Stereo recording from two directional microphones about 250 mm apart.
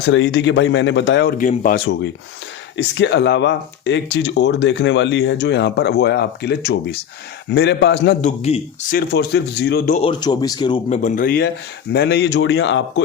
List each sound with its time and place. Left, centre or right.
0.1 s speech: left
2.7 s speech: left
8.2 s speech: left
9.0 s speech: left